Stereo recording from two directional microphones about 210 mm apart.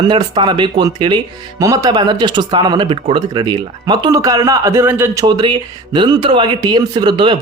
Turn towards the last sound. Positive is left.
turn(degrees=-20)  # may be behind; listen again after turning